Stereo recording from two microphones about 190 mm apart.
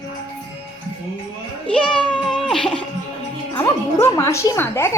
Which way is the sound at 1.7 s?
5° left (ahead or behind).